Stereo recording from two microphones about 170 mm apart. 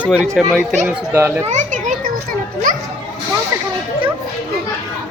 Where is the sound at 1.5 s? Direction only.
45° right (ahead or behind).